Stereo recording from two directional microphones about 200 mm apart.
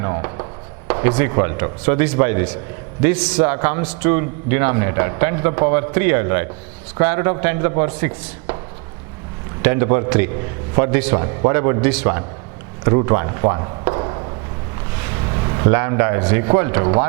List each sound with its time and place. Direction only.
0.0 s a man's voice: 20° right (ahead or behind)
9.6 s a man's voice: 10° right (ahead or behind)
15.7 s a man's voice: 15° right (ahead or behind)